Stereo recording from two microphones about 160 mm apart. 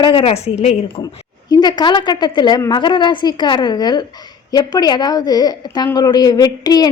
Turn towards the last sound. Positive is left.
turn(degrees=25)  # may be behind; listen again after turning